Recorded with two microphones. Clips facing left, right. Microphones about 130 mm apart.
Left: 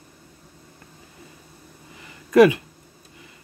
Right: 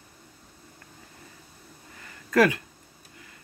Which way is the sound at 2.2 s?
20° left (ahead or behind).